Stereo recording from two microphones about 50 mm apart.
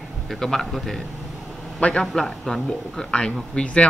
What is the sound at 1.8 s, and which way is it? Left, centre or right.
Speech, left.